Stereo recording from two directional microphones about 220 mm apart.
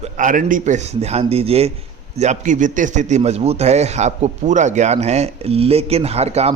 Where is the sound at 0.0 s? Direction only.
35° right (ahead or behind).